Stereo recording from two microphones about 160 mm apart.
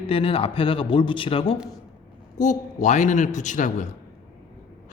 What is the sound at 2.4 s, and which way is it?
A man's voice, 50° left (ahead or behind).